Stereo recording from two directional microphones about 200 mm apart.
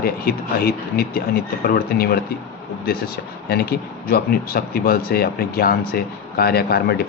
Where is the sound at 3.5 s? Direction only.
50° left (ahead or behind).